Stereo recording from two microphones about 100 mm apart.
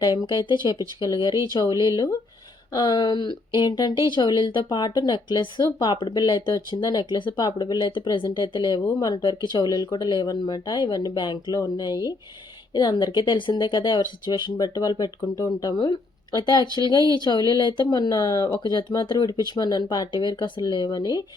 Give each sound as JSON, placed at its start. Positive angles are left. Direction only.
{"t": 0.0, "sound": "speech", "side_deg": 40}